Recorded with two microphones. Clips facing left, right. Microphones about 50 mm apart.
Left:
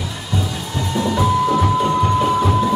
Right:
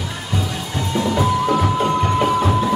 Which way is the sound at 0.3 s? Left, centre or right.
Right.